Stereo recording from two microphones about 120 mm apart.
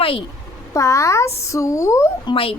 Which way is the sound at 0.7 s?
25° left (ahead or behind).